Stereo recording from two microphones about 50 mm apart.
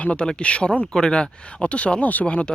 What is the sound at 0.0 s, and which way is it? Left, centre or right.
Speech, left.